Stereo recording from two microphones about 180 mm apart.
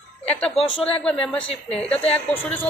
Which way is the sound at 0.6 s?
30° left (ahead or behind).